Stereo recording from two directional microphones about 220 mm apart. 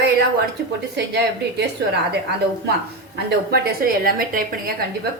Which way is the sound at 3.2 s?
45° right (ahead or behind).